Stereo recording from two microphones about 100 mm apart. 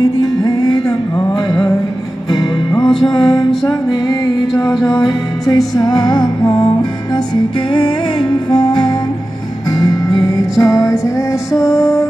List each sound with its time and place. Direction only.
0.0 s music: 40° left (ahead or behind)